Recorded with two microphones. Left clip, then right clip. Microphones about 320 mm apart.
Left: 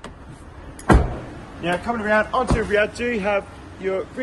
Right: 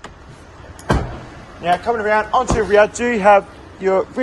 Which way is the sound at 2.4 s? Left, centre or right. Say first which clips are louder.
Right 6 dB; centre.